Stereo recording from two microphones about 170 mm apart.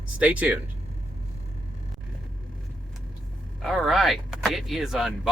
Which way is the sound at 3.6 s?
Centre (ahead or behind).